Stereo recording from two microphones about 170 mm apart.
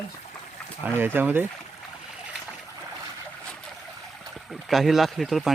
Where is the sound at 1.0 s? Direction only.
10° right (ahead or behind).